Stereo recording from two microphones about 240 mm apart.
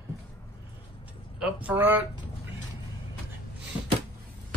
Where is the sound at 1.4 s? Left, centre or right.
Centre.